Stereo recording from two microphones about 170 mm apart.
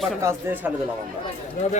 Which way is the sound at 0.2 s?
15° right (ahead or behind).